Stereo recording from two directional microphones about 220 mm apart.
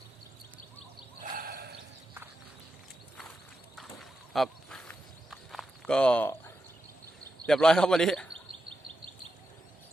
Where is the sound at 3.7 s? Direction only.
Centre (ahead or behind).